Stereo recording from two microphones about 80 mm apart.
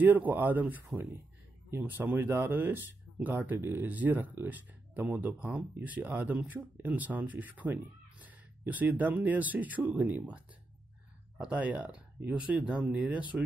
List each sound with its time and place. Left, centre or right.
0.0 s speech: right